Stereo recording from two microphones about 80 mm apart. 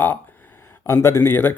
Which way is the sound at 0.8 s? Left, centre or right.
Left.